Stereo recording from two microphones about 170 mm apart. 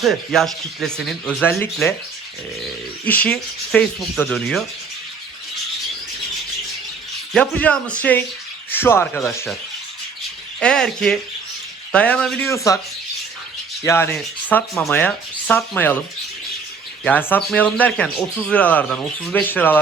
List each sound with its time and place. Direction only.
0.0 s speech: centre (ahead or behind)
3.1 s speech: 10° left (ahead or behind)
7.3 s speech: 10° left (ahead or behind)
10.6 s speech: 5° left (ahead or behind)
12.5 s speech: 20° left (ahead or behind)
13.8 s speech: 15° left (ahead or behind)
17.0 s speech: 10° left (ahead or behind)